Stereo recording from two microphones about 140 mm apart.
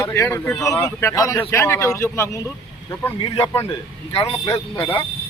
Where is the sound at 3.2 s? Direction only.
40° left (ahead or behind).